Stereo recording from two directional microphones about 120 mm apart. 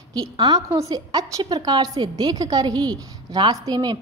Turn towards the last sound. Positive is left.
turn(degrees=-35)  # may be behind; listen again after turning